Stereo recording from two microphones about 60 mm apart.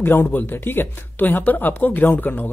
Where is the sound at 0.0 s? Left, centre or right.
Left.